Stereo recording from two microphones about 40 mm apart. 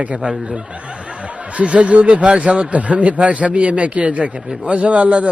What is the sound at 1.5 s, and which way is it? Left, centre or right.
A man's voice, right.